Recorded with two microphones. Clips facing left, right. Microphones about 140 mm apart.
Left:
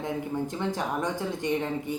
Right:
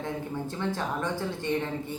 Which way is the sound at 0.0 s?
15° left (ahead or behind).